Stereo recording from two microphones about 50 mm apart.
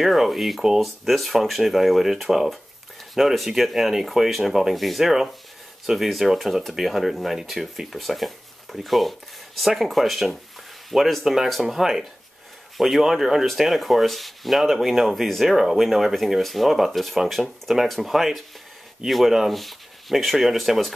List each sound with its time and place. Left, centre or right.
0.0 s speech: centre